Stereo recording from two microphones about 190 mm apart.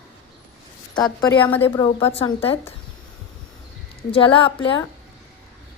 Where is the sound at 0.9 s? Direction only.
20° left (ahead or behind).